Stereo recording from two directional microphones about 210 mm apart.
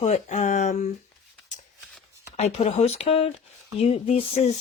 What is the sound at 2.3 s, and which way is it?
Speech, 30° left (ahead or behind).